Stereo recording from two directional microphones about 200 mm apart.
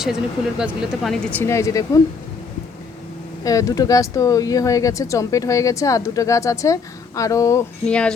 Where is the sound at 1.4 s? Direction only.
15° left (ahead or behind).